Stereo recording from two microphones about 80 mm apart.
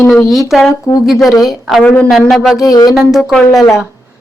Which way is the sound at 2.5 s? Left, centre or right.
Left.